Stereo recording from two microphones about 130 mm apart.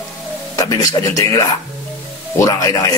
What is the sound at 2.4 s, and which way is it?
Speech, 25° left (ahead or behind).